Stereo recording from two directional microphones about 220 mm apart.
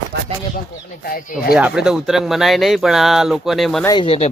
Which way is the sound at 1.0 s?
40° left (ahead or behind).